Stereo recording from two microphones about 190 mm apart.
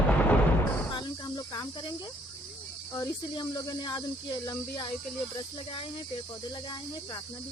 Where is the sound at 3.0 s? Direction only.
20° left (ahead or behind).